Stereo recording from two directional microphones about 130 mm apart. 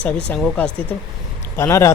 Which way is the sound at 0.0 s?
10° left (ahead or behind).